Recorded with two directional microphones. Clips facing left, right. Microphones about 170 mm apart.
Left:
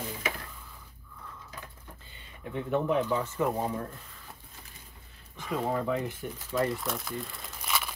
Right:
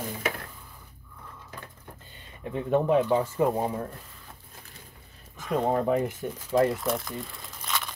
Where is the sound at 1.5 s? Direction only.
45° right (ahead or behind).